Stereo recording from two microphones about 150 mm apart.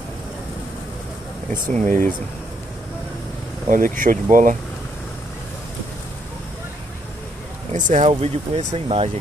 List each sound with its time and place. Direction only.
1.5 s speech: 55° right (ahead or behind)
3.6 s speech: 60° right (ahead or behind)
7.7 s speech: 55° right (ahead or behind); by 9.1 s 40° right (ahead or behind)